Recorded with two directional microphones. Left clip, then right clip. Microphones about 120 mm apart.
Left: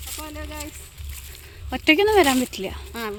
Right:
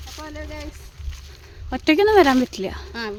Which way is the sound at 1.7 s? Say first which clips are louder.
Right 1 dB; 35° right (ahead or behind).